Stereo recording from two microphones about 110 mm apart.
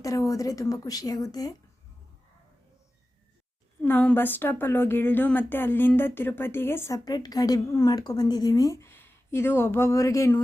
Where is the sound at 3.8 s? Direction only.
20° left (ahead or behind).